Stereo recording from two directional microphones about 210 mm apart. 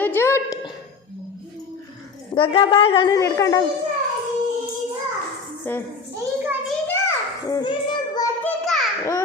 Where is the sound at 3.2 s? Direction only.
15° left (ahead or behind).